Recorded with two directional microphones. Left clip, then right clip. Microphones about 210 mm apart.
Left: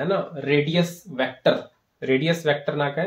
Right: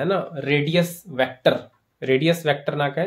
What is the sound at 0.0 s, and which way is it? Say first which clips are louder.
Speech: right 1 dB; 40° right (ahead or behind).